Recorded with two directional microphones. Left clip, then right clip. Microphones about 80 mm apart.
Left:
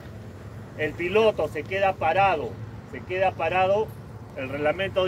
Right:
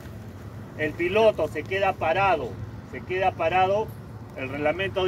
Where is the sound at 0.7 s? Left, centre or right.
Left.